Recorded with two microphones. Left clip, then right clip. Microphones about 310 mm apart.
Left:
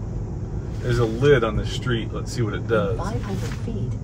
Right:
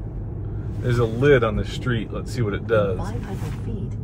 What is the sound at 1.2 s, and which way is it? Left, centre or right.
Speech, right.